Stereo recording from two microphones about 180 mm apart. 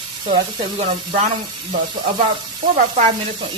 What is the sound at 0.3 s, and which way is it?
Speech, 30° right (ahead or behind).